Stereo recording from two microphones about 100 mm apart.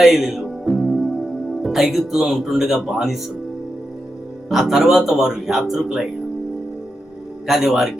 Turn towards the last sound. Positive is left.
turn(degrees=-5)  # may be behind; listen again after turning